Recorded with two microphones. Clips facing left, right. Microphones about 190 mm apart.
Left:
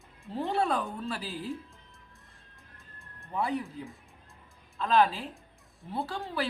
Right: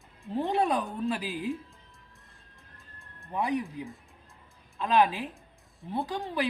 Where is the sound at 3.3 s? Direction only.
15° right (ahead or behind).